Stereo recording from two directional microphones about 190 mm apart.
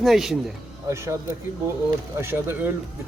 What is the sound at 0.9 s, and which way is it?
Speech, 15° right (ahead or behind).